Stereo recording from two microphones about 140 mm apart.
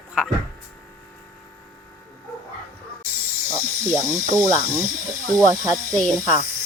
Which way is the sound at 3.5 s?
20° right (ahead or behind).